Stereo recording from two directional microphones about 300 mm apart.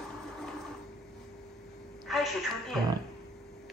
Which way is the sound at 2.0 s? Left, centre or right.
Centre.